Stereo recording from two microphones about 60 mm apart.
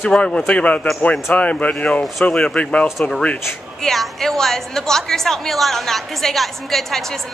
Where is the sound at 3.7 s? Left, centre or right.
Centre.